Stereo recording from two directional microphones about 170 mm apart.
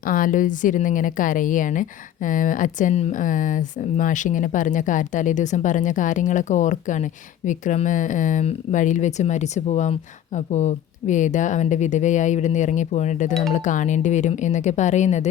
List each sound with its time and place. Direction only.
0.0 s a woman's voice: 55° left (ahead or behind)